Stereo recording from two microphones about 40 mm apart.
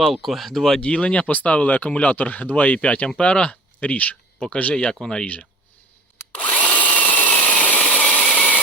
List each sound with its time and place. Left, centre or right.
0.0 s speech: centre
0.8 s speech: left
4.4 s speech: left
5.2 s speech: left
6.3 s drill: left
7.9 s a sound: left